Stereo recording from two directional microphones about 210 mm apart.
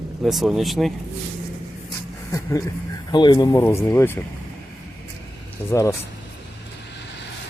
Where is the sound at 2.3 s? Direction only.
15° left (ahead or behind).